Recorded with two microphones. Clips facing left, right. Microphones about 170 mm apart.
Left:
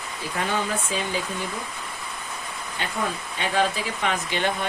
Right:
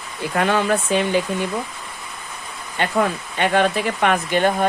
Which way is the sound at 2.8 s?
65° right (ahead or behind).